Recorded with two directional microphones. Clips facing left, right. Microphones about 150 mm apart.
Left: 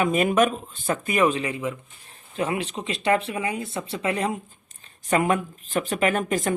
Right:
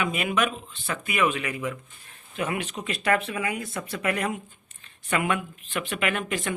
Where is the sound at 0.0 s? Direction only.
40° left (ahead or behind); by 4.4 s 25° left (ahead or behind).